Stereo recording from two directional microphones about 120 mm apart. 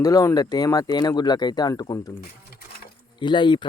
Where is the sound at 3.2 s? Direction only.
40° left (ahead or behind).